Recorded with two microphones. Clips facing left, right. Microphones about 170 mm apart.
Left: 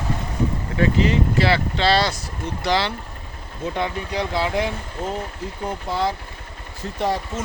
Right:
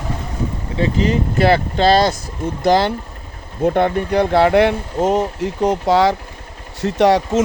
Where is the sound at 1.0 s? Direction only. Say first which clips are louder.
Right 4 dB; 45° right (ahead or behind).